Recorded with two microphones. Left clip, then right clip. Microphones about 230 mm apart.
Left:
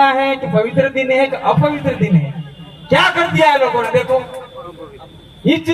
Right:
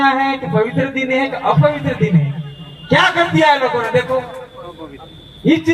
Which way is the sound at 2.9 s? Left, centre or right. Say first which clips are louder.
Even; left.